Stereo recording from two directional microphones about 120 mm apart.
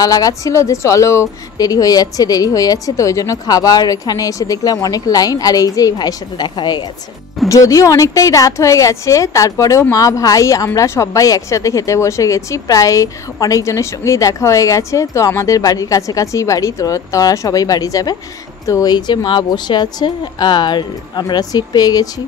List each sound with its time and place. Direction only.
0.0 s a woman's voice: 30° left (ahead or behind)